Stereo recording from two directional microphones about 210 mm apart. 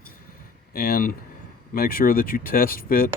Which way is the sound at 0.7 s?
45° left (ahead or behind).